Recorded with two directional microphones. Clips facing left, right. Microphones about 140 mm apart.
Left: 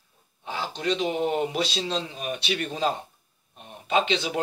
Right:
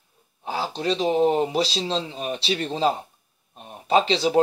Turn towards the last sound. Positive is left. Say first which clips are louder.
# right 5 dB
turn(degrees=-35)  # may be behind; listen again after turning